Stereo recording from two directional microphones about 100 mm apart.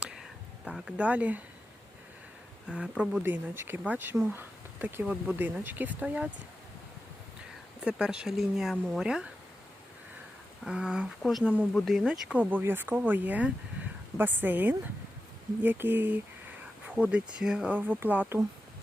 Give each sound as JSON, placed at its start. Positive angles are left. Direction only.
{"t": 0.0, "sound": "whispering", "side_deg": -5}
{"t": 2.6, "sound": "speech", "side_deg": -10}
{"t": 7.8, "sound": "speech", "side_deg": -10}
{"t": 10.6, "sound": "speech", "side_deg": -10}
{"t": 12.0, "sound": "speech", "side_deg": -10}